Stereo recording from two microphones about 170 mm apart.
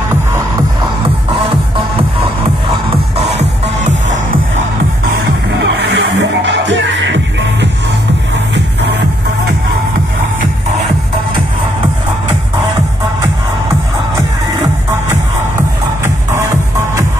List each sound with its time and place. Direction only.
1.3 s music: 30° right (ahead or behind)
3.8 s music: 45° right (ahead or behind)
5.6 s music: 85° right